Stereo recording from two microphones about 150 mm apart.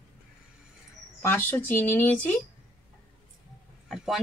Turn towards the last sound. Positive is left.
turn(degrees=0)  # may be behind; listen again after turning